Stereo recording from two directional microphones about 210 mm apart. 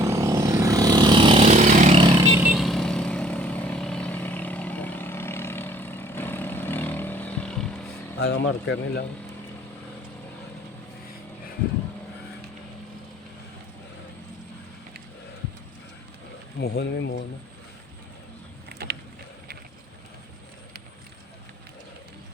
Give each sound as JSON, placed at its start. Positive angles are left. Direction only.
{"t": 0.0, "sound": "vehicle", "side_deg": -15}
{"t": 2.2, "sound": "vehicle", "side_deg": -10}
{"t": 8.2, "sound": "speech", "side_deg": 55}
{"t": 16.6, "sound": "speech", "side_deg": 50}